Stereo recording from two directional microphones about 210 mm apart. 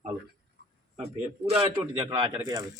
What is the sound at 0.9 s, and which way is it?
A man's voice, 30° right (ahead or behind).